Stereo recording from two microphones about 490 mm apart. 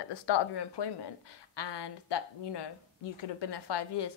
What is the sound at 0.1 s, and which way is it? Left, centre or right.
A woman's voice, left.